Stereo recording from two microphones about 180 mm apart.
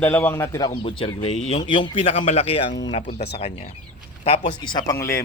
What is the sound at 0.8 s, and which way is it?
A man's voice, 30° left (ahead or behind).